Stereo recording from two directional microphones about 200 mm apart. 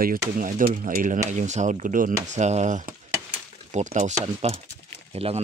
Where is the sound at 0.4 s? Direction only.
40° right (ahead or behind).